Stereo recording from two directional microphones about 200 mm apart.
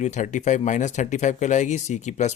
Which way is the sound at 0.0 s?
35° left (ahead or behind).